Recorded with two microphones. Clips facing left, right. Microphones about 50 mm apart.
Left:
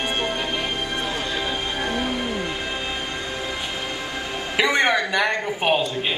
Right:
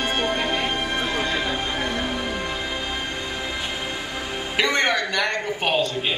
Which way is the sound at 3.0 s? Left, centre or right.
Right.